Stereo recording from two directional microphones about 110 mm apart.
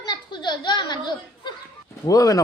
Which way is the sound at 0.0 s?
45° left (ahead or behind).